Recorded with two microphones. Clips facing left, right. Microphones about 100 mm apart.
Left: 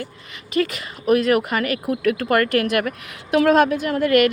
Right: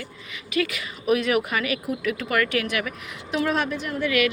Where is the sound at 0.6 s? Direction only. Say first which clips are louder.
Left 4 dB; 35° left (ahead or behind).